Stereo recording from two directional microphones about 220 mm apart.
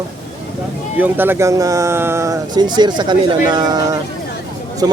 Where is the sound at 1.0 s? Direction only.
10° right (ahead or behind).